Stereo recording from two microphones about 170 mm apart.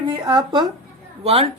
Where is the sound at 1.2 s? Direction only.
35° right (ahead or behind).